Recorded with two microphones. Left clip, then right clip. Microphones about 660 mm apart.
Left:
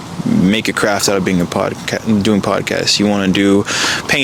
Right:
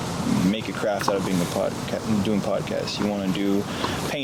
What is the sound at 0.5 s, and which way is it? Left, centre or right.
Speech, left.